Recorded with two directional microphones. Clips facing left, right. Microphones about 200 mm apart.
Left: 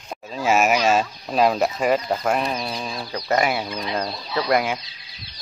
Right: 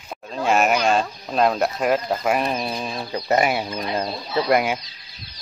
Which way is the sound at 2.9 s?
25° right (ahead or behind).